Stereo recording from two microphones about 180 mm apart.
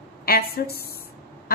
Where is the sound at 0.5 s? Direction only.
60° left (ahead or behind).